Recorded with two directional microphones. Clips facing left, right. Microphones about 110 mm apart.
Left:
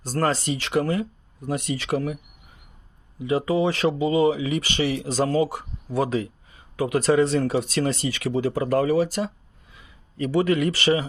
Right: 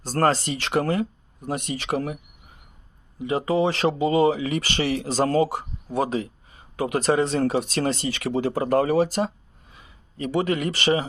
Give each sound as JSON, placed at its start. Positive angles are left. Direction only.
{"t": 0.3, "sound": "speech", "side_deg": -35}
{"t": 1.5, "sound": "speech", "side_deg": -25}
{"t": 1.9, "sound": "speech", "side_deg": -35}
{"t": 3.2, "sound": "speech", "side_deg": -30}
{"t": 5.5, "sound": "speech", "side_deg": -30}
{"t": 9.2, "sound": "a sound", "side_deg": -40}
{"t": 10.2, "sound": "speech", "side_deg": -25}